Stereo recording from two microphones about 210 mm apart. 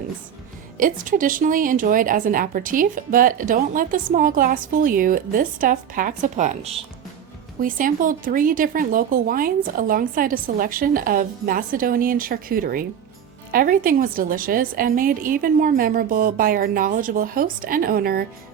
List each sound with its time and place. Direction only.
0.8 s speech: 40° right (ahead or behind)
7.6 s speech: 40° right (ahead or behind)